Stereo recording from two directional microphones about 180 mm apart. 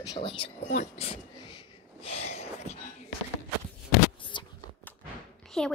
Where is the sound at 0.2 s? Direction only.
30° left (ahead or behind).